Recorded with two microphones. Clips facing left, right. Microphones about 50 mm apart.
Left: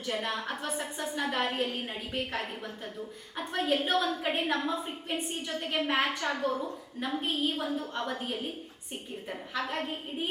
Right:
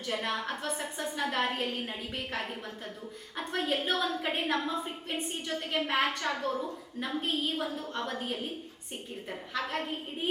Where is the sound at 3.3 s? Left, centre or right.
Centre.